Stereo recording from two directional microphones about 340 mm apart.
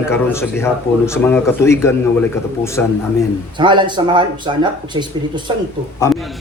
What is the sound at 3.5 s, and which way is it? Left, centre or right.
Speech, centre.